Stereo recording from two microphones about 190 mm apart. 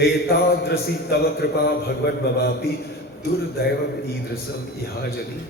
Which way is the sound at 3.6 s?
55° left (ahead or behind).